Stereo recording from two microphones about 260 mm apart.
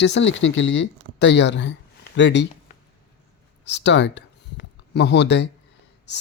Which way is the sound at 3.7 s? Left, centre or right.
Left.